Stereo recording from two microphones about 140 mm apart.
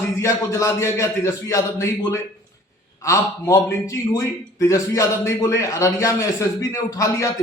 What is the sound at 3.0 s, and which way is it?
A man's voice, 20° left (ahead or behind).